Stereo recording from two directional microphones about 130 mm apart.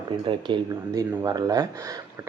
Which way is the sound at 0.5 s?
35° right (ahead or behind).